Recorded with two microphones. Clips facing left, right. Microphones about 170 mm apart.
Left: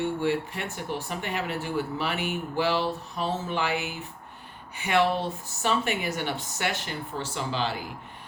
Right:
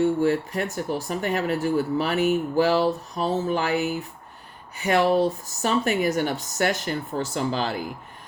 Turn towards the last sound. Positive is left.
turn(degrees=-45)  # may be behind; listen again after turning